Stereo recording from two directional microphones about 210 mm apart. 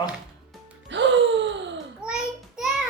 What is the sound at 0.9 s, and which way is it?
Gasp, 60° right (ahead or behind).